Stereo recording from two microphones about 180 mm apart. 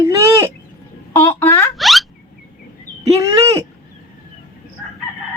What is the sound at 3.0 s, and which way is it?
Speech, 15° right (ahead or behind).